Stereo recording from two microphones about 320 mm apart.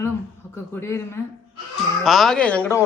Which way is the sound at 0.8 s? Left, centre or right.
Centre.